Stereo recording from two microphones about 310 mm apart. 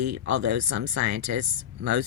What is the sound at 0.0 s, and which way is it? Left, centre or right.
Speech, right.